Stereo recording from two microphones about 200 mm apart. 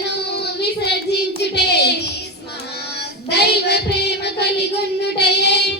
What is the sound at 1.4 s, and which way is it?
Child singing, 55° left (ahead or behind).